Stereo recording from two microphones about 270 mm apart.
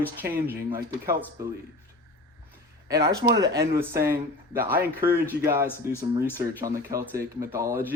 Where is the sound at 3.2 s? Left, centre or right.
Centre.